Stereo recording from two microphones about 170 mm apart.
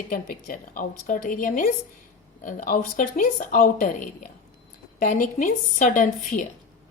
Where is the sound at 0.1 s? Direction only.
55° left (ahead or behind).